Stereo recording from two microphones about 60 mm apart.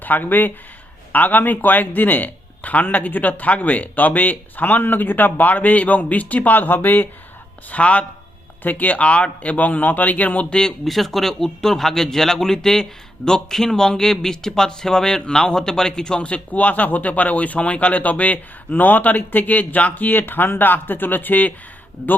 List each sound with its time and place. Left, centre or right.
0.0 s a man's voice: left
7.7 s a man's voice: left
10.5 s speech: centre; by 21.5 s left